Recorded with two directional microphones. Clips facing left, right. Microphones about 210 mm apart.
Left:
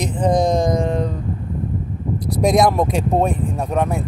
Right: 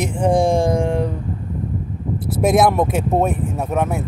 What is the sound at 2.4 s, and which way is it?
Speech, 5° right (ahead or behind).